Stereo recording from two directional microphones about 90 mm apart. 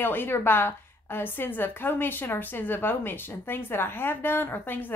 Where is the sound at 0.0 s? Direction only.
25° left (ahead or behind).